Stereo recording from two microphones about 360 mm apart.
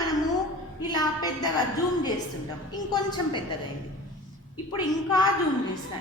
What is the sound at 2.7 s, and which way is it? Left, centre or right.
Speech, centre.